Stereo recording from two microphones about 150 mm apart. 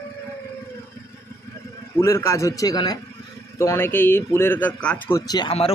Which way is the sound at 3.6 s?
15° left (ahead or behind).